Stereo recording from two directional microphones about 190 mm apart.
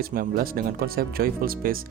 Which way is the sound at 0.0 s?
50° right (ahead or behind).